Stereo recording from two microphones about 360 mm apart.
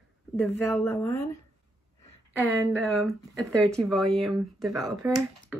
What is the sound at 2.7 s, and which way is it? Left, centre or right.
Speech, centre.